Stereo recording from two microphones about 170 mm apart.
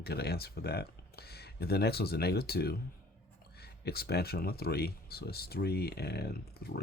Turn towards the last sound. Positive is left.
turn(degrees=65)  # may be behind; listen again after turning